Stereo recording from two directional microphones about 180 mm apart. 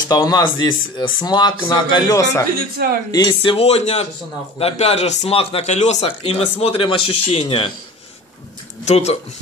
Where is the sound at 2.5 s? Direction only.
55° right (ahead or behind).